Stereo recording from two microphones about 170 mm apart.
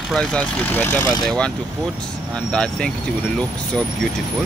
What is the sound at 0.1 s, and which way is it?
Speech, 5° left (ahead or behind).